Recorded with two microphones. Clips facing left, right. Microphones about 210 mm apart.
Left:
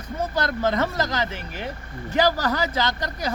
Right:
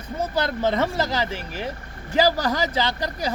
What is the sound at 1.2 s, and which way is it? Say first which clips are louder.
Speech: right 1 dB; 30° right (ahead or behind).